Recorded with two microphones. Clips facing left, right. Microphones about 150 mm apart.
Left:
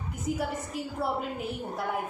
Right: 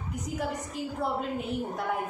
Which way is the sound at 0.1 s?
Centre (ahead or behind).